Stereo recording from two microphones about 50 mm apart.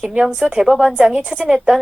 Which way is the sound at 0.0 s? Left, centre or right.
Centre.